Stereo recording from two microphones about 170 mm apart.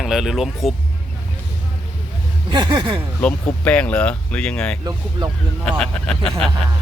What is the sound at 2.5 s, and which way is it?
Speech, 25° right (ahead or behind).